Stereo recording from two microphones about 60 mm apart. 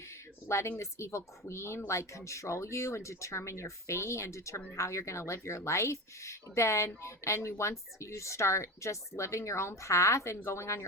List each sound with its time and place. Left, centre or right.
0.4 s speech: left